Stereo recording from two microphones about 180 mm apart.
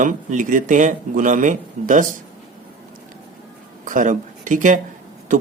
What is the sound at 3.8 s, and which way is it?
Speech, 45° right (ahead or behind).